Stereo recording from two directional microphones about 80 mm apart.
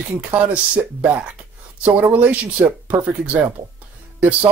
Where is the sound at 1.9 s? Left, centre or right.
Right.